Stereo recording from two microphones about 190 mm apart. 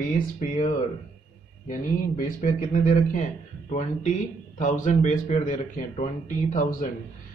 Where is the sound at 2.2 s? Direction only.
45° left (ahead or behind).